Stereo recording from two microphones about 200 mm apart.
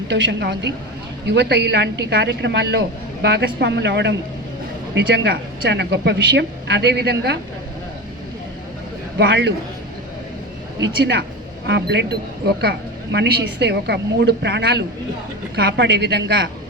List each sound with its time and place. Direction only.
0.1 s a woman's voice: 60° right (ahead or behind)
9.1 s a woman's voice: 60° right (ahead or behind)
10.8 s a woman's voice: 60° right (ahead or behind)